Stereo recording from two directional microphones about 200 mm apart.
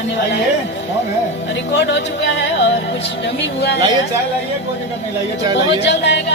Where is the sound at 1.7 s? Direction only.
65° left (ahead or behind).